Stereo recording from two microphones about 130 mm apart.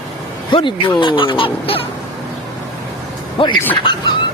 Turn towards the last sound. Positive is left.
turn(degrees=40)  # may be behind; listen again after turning